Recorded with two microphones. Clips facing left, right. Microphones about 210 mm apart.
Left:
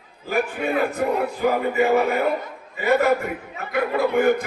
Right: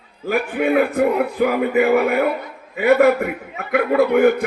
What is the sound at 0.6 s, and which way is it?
A man's voice, 60° right (ahead or behind).